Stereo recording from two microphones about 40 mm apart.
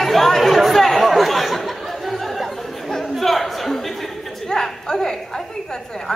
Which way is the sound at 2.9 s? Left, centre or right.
Centre.